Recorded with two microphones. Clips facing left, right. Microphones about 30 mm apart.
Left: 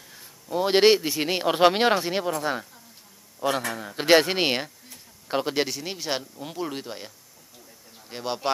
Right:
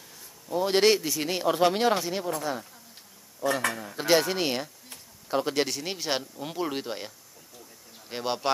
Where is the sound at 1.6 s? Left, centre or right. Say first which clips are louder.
Left 5 dB; left.